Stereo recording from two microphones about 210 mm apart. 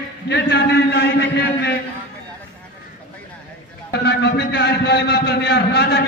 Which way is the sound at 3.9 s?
55° left (ahead or behind).